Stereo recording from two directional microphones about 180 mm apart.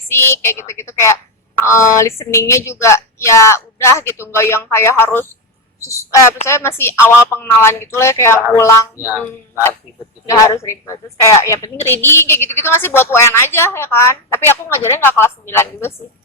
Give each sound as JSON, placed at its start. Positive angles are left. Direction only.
{"t": 0.1, "sound": "speech", "side_deg": 15}
{"t": 9.0, "sound": "speech", "side_deg": -10}
{"t": 10.2, "sound": "speech", "side_deg": 20}